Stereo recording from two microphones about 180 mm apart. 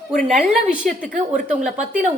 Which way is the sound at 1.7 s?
45° right (ahead or behind).